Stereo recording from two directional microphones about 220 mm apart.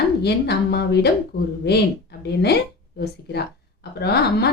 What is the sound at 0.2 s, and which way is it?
A woman's voice, 50° left (ahead or behind).